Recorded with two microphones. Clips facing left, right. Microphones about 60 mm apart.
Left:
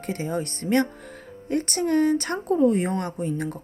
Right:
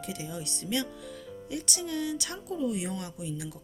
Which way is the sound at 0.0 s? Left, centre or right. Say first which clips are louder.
Left 10 dB; left.